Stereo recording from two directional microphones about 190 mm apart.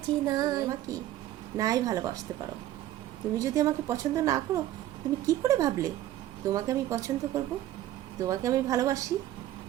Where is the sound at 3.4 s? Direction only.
15° right (ahead or behind).